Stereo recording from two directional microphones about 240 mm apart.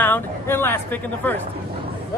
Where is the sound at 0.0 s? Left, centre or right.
Centre.